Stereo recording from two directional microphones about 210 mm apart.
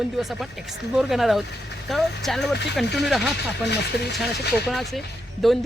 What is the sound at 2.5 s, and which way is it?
Speech, 55° left (ahead or behind).